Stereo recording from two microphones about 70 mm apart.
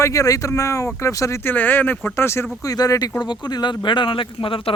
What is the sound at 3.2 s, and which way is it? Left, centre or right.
Speech, left.